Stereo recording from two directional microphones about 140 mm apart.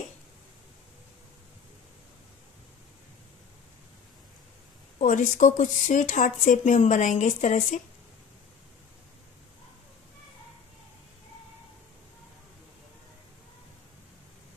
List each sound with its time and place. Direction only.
4.9 s speech: 65° left (ahead or behind)